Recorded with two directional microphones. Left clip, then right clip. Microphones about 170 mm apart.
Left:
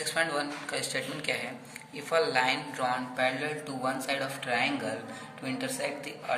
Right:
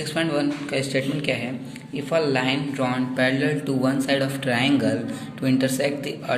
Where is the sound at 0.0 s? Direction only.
20° right (ahead or behind).